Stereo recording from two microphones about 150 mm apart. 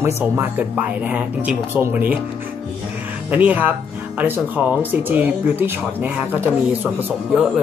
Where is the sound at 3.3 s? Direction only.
10° right (ahead or behind).